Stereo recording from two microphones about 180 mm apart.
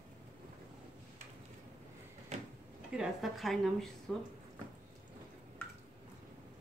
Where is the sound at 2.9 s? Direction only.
5° right (ahead or behind).